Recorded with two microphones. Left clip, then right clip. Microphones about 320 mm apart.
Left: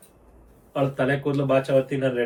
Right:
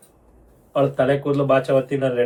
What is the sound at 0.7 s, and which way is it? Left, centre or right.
A woman's voice, centre.